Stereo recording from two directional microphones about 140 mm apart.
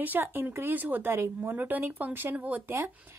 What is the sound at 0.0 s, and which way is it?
A woman's voice, 15° right (ahead or behind).